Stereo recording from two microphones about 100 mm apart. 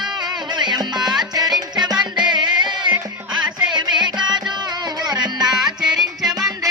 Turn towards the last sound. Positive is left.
turn(degrees=-5)  # may be behind; listen again after turning